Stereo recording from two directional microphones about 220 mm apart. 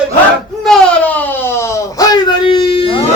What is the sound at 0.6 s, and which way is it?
Wail, 5° left (ahead or behind).